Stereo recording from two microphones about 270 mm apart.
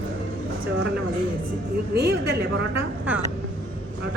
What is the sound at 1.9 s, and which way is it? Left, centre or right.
Speech, right.